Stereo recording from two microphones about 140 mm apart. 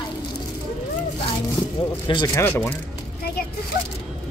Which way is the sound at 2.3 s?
15° left (ahead or behind).